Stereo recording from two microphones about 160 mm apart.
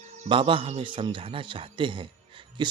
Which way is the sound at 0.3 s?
35° right (ahead or behind).